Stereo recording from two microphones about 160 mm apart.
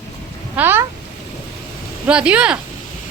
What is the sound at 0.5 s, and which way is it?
Speech, 15° right (ahead or behind).